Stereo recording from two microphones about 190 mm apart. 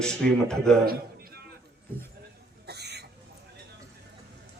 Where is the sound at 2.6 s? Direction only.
60° right (ahead or behind).